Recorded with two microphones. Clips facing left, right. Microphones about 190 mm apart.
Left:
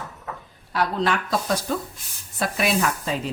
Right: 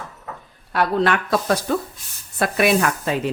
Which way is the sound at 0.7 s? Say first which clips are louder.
Right 4 dB; 60° right (ahead or behind).